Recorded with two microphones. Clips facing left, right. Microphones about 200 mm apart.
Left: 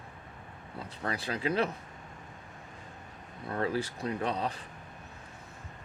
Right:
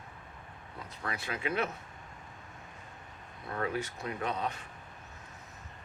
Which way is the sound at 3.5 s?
30° left (ahead or behind).